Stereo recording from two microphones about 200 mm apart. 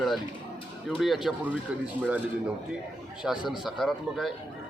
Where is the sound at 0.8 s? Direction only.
Centre (ahead or behind).